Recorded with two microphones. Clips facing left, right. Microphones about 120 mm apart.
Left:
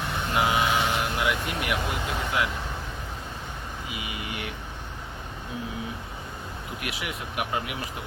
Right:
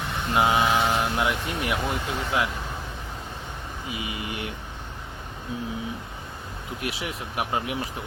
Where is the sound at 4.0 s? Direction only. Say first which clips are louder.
Right 3 dB; 25° right (ahead or behind).